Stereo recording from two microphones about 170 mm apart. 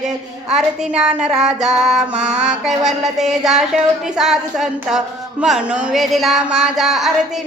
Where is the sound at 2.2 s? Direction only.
40° right (ahead or behind).